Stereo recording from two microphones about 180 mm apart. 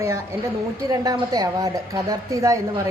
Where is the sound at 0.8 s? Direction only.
20° right (ahead or behind).